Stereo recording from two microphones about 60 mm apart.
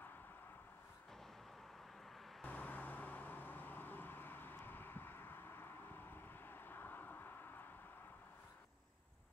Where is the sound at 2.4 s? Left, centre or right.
Left.